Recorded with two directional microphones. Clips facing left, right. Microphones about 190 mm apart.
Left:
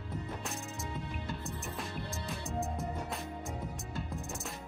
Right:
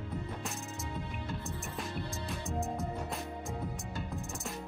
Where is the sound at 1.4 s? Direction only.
Centre (ahead or behind).